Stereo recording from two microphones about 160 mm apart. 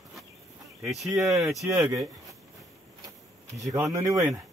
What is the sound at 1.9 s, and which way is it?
Speech, 20° right (ahead or behind).